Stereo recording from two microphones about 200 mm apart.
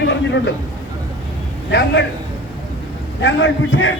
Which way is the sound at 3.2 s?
65° left (ahead or behind).